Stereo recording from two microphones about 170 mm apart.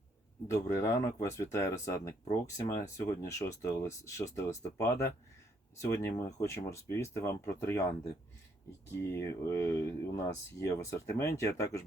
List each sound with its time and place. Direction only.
0.5 s speech: 20° left (ahead or behind)
9.0 s speech: 15° left (ahead or behind)